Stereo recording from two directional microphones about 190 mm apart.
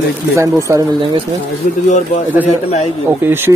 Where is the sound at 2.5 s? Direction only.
35° left (ahead or behind).